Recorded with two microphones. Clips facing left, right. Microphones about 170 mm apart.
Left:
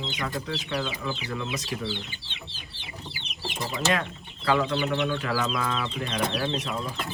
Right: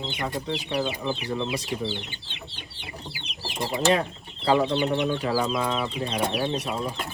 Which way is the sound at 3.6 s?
35° right (ahead or behind).